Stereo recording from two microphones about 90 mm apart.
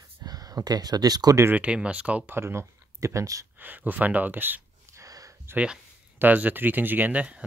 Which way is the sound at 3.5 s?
20° right (ahead or behind).